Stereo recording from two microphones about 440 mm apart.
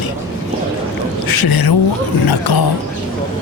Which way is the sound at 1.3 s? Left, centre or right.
Left.